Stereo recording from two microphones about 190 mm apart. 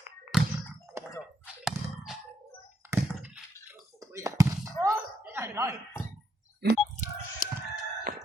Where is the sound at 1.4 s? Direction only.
Centre (ahead or behind).